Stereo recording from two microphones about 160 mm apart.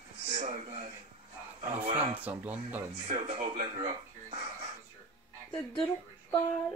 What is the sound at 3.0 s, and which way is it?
Speech, 40° right (ahead or behind).